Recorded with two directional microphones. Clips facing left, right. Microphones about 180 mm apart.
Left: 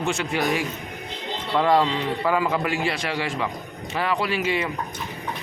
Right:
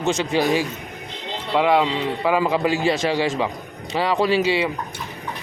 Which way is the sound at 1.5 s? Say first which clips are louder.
Right 2 dB; 5° right (ahead or behind).